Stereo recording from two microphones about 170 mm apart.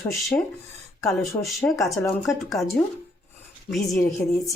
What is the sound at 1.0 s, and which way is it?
A woman's voice, centre (ahead or behind).